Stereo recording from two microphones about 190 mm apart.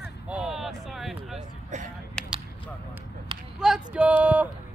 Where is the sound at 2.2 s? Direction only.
5° left (ahead or behind).